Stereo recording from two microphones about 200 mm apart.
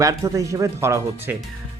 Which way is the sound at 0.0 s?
15° right (ahead or behind).